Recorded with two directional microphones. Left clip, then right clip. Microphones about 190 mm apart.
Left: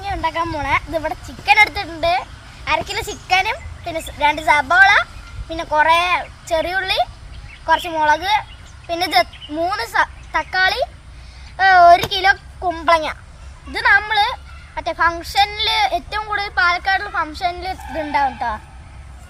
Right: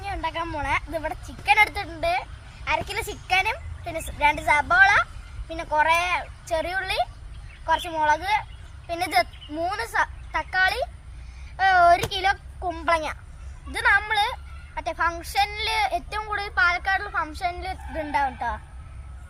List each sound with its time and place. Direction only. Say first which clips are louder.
0.0 s a woman's voice: left 8 dB; 10° right (ahead or behind)